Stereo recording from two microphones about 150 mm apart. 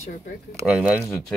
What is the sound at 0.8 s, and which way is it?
Speech, 5° right (ahead or behind).